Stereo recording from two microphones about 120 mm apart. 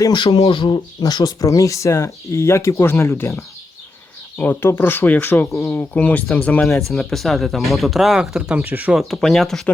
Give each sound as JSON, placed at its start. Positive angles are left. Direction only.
{"t": 0.0, "sound": "speech", "side_deg": 35}
{"t": 0.3, "sound": "speech", "side_deg": 50}
{"t": 4.4, "sound": "speech", "side_deg": 20}
{"t": 9.0, "sound": "speech", "side_deg": 0}